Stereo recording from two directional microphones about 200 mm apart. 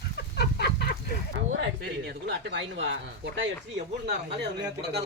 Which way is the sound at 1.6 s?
60° right (ahead or behind).